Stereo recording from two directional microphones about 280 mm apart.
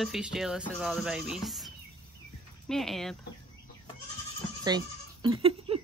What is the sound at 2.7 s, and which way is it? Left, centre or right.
Speech, centre.